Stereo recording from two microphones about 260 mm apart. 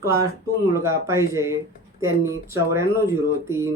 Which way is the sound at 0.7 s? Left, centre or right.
Centre.